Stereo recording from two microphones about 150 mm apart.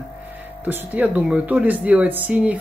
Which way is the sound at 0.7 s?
10° right (ahead or behind).